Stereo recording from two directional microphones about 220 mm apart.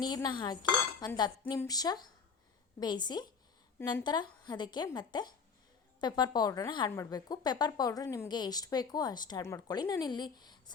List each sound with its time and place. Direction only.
0.0 s a woman's voice: 20° left (ahead or behind)